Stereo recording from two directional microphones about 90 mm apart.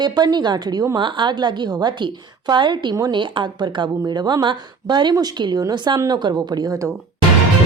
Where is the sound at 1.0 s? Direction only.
60° right (ahead or behind); by 6.9 s 35° right (ahead or behind).